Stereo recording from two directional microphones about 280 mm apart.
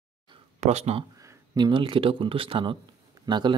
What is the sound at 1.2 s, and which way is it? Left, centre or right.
Speech, centre.